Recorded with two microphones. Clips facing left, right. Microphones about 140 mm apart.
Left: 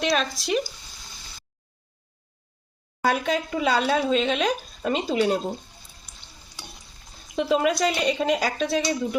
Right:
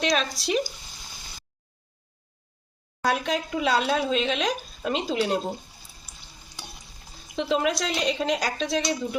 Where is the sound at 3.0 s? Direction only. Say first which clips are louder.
Left 2 dB; centre (ahead or behind).